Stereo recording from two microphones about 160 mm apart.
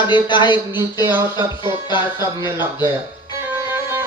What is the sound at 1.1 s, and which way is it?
Music, 15° right (ahead or behind).